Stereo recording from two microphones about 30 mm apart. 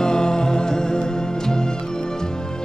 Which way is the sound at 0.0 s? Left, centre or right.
Left.